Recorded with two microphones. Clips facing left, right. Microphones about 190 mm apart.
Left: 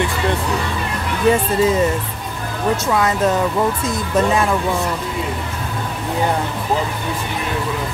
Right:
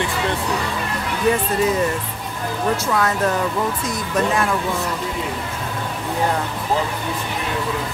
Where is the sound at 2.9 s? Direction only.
15° left (ahead or behind).